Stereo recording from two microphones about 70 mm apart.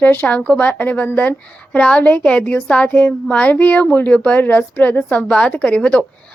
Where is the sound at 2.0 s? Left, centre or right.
Left.